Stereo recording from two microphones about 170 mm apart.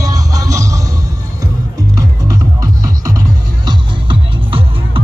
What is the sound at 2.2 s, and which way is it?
Music, 20° right (ahead or behind).